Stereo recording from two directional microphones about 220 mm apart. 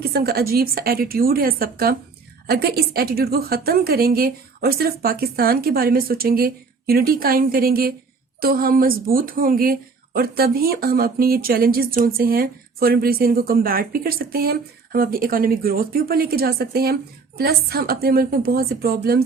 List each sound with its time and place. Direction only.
0.0 s speech: 45° right (ahead or behind)